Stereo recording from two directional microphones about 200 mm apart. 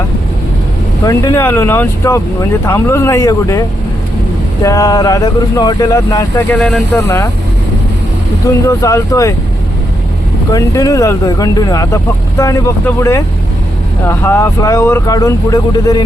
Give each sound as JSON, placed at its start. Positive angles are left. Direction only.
{"t": 1.0, "sound": "speech", "side_deg": 15}
{"t": 8.4, "sound": "speech", "side_deg": 15}
{"t": 10.5, "sound": "speech", "side_deg": 15}